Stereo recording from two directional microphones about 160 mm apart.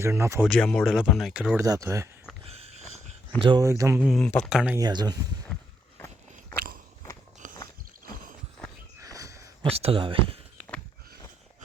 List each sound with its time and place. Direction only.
0.0 s speech: 15° right (ahead or behind)
0.4 s speech: 5° left (ahead or behind)
1.6 s speech: 20° right (ahead or behind)
2.4 s a sound: 40° right (ahead or behind)
3.4 s speech: 30° right (ahead or behind)
3.7 s speech: 20° right (ahead or behind)
4.0 s speech: centre (ahead or behind)
4.8 s speech: 25° right (ahead or behind)
5.5 s a sound: 5° left (ahead or behind)
9.0 s a sound: 20° right (ahead or behind)
9.6 s speech: 40° right (ahead or behind)